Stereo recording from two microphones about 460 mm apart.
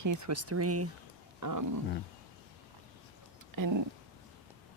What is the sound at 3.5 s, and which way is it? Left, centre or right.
Speech, right.